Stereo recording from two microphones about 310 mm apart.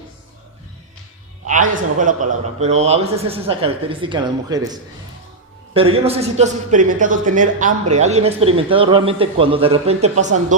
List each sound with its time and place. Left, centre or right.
1.5 s a man's voice: right